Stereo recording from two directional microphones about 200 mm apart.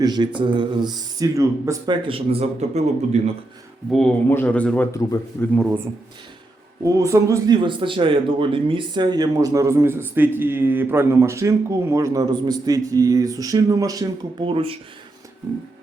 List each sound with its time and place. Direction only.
0.0 s speech: 20° right (ahead or behind)
3.9 s speech: 5° left (ahead or behind)
6.8 s a man's voice: 15° right (ahead or behind)